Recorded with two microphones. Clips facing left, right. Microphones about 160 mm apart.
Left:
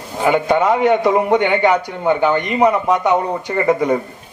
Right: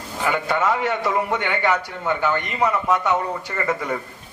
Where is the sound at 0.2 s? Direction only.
20° left (ahead or behind).